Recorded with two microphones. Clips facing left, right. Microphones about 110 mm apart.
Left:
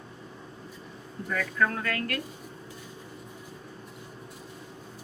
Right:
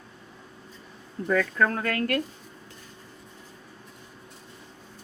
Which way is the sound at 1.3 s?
50° right (ahead or behind).